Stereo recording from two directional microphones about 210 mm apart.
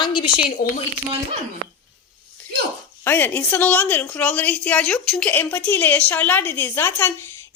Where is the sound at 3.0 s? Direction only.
10° left (ahead or behind).